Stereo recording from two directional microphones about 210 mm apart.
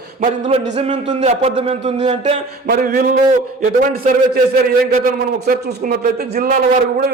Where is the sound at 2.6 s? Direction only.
40° right (ahead or behind).